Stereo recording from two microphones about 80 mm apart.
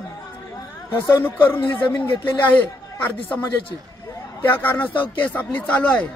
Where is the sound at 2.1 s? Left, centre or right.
Left.